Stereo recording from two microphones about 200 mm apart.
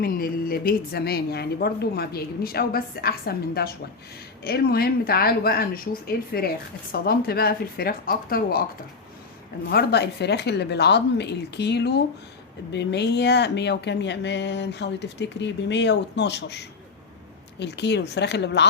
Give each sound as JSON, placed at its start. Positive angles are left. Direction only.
{"t": 0.0, "sound": "a woman's voice", "side_deg": 45}
{"t": 9.6, "sound": "speech", "side_deg": 55}